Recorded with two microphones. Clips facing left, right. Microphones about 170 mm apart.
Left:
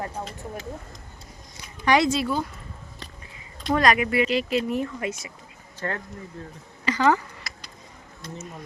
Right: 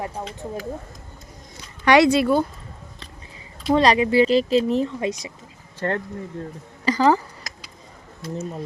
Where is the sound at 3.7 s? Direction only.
30° right (ahead or behind).